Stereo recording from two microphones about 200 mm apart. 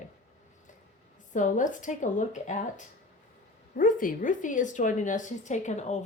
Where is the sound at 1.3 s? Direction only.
40° left (ahead or behind).